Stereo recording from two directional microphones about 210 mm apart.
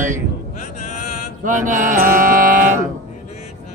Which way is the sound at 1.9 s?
40° right (ahead or behind).